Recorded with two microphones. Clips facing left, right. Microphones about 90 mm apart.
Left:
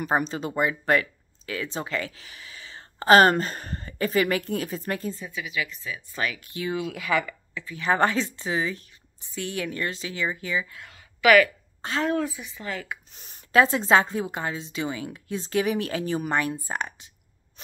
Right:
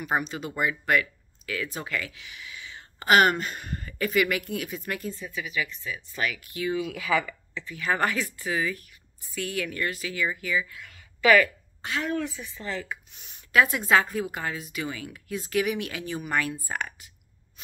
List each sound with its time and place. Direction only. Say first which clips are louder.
0.0 s speech: left 3 dB; 35° left (ahead or behind)
5.8 s speech: left 1 dB; 15° left (ahead or behind)
6.9 s speech: even; centre (ahead or behind)
7.7 s speech: left 4 dB; 25° left (ahead or behind)
12.3 s speech: left 1 dB; 15° left (ahead or behind)
13.1 s speech: left 2 dB; 35° left (ahead or behind)